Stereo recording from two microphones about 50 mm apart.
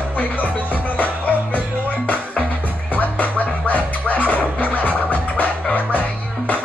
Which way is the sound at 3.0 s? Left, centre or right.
Left.